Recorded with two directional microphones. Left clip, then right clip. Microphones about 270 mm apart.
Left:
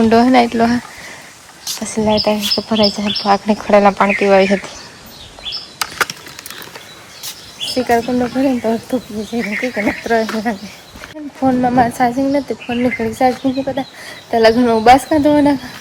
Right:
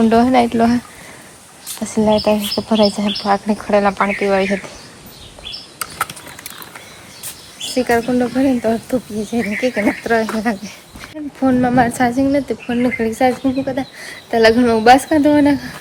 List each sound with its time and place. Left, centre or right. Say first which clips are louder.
0.0 s speech: left 2 dB; centre
1.8 s speech: even; centre
7.6 s speech: left 1 dB; centre